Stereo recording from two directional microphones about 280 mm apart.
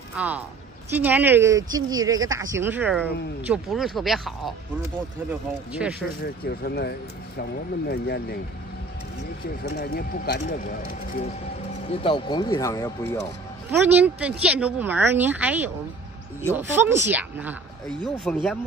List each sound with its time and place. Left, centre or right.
0.1 s a woman's voice: centre
5.7 s speech: centre
6.2 s speech: left
9.7 s speech: left
11.9 s speech: centre
13.7 s speech: centre